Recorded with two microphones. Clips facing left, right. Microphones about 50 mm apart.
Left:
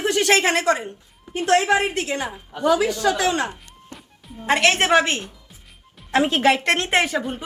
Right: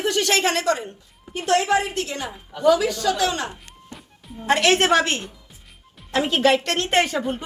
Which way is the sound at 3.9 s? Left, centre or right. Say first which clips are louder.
Even; centre.